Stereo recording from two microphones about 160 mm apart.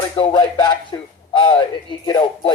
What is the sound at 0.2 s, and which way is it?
Speech, 30° left (ahead or behind).